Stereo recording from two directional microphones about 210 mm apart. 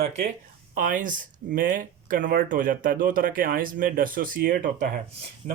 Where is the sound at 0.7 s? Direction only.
40° right (ahead or behind).